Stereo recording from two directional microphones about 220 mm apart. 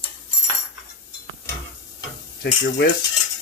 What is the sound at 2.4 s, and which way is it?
Stir, 45° left (ahead or behind).